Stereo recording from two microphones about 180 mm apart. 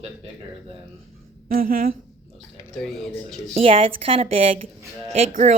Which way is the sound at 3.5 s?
30° right (ahead or behind).